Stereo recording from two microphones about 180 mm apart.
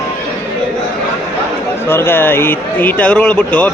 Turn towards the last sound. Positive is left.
turn(degrees=5)  # may be behind; listen again after turning